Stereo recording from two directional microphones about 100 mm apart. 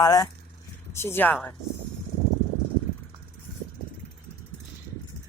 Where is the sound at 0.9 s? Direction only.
25° left (ahead or behind).